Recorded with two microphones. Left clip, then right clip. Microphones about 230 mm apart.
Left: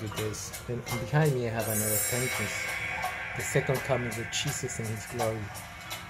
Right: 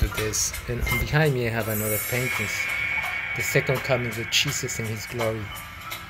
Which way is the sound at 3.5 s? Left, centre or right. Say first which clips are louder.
Right 4 dB; centre.